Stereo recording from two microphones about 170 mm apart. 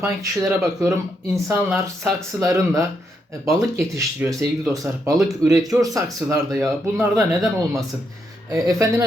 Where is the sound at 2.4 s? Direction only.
20° right (ahead or behind).